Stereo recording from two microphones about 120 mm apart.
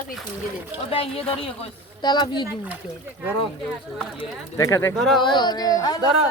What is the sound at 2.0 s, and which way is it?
Speech, 40° left (ahead or behind).